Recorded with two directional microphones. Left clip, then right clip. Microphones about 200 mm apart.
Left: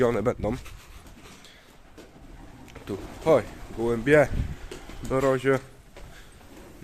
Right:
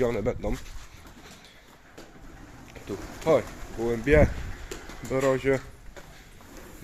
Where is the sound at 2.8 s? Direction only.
15° left (ahead or behind).